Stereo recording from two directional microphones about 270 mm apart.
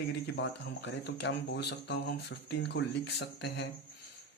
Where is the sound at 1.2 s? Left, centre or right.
Left.